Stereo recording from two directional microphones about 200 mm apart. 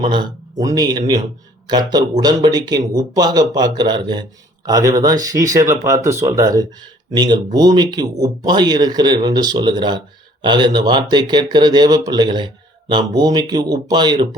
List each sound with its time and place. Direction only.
0.0 s a man's voice: 20° right (ahead or behind)